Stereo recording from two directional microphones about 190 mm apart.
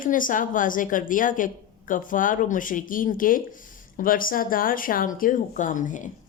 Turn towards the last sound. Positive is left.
turn(degrees=40)  # may be behind; listen again after turning